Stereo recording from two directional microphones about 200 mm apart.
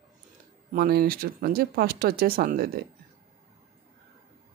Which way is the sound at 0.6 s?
50° right (ahead or behind).